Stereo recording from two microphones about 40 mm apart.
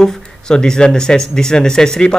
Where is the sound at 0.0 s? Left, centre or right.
Centre.